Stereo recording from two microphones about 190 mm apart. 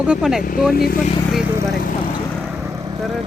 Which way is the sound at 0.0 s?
5° right (ahead or behind).